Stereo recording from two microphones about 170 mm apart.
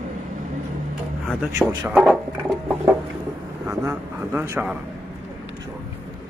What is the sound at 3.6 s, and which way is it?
Speech, 15° right (ahead or behind).